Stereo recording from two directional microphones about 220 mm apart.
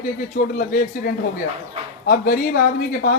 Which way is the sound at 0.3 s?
40° left (ahead or behind).